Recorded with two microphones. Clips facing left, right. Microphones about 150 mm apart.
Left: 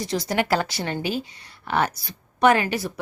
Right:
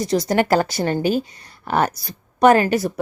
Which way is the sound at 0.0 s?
40° right (ahead or behind).